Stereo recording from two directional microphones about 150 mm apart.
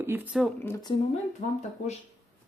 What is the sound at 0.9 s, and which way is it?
Speech, 30° left (ahead or behind).